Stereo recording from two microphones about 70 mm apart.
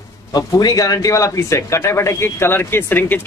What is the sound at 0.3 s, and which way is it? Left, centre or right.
A man's voice, left.